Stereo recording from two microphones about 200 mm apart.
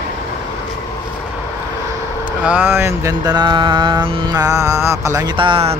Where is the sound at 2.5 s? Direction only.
10° right (ahead or behind).